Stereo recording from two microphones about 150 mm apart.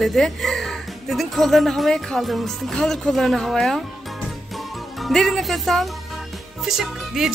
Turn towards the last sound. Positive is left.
turn(degrees=-5)  # may be behind; listen again after turning